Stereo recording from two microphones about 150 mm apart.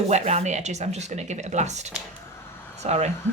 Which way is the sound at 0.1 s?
50° right (ahead or behind).